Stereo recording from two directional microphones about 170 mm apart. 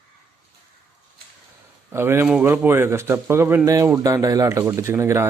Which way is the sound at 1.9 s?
15° right (ahead or behind).